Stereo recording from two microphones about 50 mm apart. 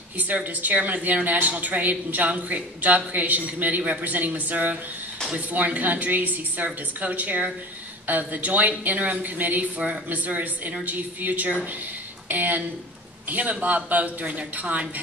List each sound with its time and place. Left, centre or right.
0.2 s speech: right